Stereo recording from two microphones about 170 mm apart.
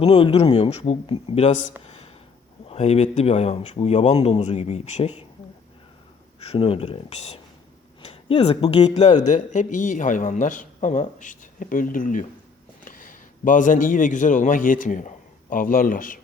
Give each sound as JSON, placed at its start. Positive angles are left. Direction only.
{"t": 0.0, "sound": "speech", "side_deg": 35}
{"t": 1.8, "sound": "a sound", "side_deg": 35}
{"t": 2.6, "sound": "speech", "side_deg": 40}
{"t": 6.4, "sound": "speech", "side_deg": 35}
{"t": 9.0, "sound": "a man's voice", "side_deg": 45}